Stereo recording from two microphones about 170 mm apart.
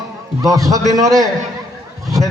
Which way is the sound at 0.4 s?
20° right (ahead or behind).